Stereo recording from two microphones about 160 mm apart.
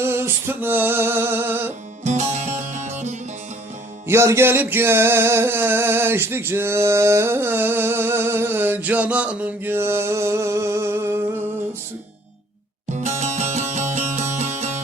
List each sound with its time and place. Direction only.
0.0 s music: 15° right (ahead or behind)
2.0 s music: 45° right (ahead or behind)
4.0 s music: 15° right (ahead or behind)
12.9 s music: 45° right (ahead or behind)